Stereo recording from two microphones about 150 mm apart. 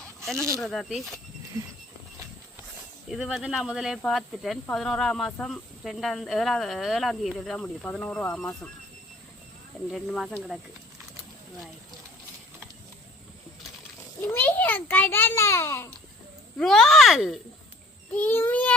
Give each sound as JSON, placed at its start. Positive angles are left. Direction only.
{"t": 0.3, "sound": "speech", "side_deg": -20}
{"t": 0.6, "sound": "speech", "side_deg": 0}
{"t": 3.1, "sound": "speech", "side_deg": 0}
{"t": 9.9, "sound": "speech", "side_deg": 0}
{"t": 14.2, "sound": "a child's voice", "side_deg": 15}
{"t": 16.6, "sound": "speech", "side_deg": 5}
{"t": 18.1, "sound": "a sound", "side_deg": 10}